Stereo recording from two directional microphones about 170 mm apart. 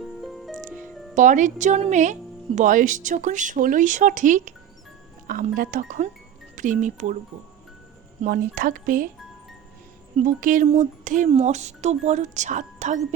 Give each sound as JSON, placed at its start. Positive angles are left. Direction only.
{"t": 0.0, "sound": "music", "side_deg": 0}
{"t": 1.1, "sound": "speech", "side_deg": -45}
{"t": 8.2, "sound": "speech", "side_deg": -55}
{"t": 10.2, "sound": "speech", "side_deg": -50}